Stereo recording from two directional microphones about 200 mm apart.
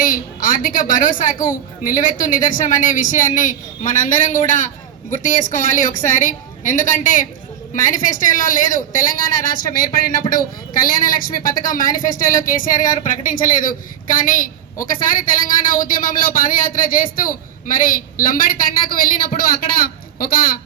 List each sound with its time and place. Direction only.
0.0 s a woman's voice: 45° left (ahead or behind)
10.8 s speech: 45° left (ahead or behind)